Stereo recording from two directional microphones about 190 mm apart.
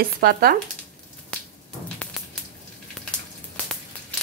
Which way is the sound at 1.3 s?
5° left (ahead or behind).